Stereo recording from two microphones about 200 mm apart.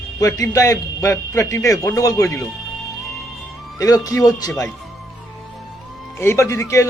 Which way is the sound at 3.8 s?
15° left (ahead or behind).